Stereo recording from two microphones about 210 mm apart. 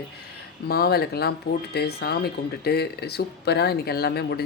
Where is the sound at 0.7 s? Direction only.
50° left (ahead or behind).